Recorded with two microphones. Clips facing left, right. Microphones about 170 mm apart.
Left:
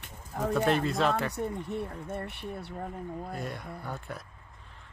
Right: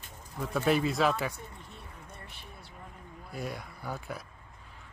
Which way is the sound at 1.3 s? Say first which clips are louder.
Left 14 dB; 65° left (ahead or behind).